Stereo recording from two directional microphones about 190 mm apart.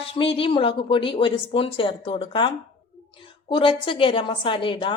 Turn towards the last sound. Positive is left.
turn(degrees=25)  # may be behind; listen again after turning